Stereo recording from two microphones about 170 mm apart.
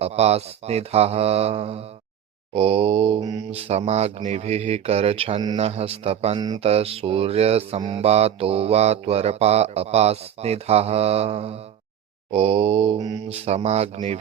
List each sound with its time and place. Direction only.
0.0 s mantra: 40° right (ahead or behind)
3.5 s mantra: 35° right (ahead or behind)
13.2 s mantra: 35° right (ahead or behind)